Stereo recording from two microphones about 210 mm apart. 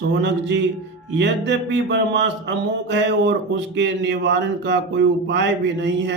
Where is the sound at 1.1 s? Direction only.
55° right (ahead or behind).